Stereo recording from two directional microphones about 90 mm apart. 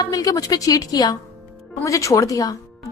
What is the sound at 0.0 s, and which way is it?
A woman's voice, 45° left (ahead or behind).